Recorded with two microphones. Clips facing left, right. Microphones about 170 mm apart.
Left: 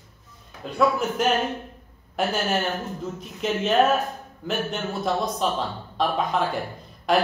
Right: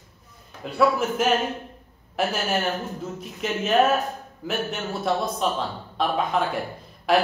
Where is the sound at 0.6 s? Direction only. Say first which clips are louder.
Right 1 dB; 5° right (ahead or behind).